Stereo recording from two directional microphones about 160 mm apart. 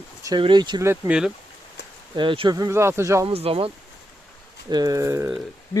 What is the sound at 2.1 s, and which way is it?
Speech, 35° right (ahead or behind).